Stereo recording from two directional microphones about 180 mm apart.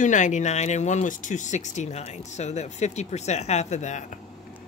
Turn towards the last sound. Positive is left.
turn(degrees=40)  # may be behind; listen again after turning